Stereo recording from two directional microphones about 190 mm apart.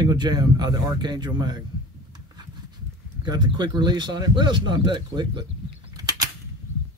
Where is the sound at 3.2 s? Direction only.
20° right (ahead or behind).